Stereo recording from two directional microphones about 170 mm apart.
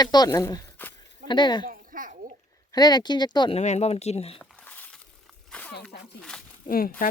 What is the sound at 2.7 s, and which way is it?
Speech, 25° left (ahead or behind).